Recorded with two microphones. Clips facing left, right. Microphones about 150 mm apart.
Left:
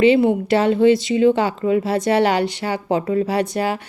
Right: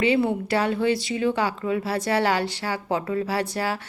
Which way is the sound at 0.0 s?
20° left (ahead or behind).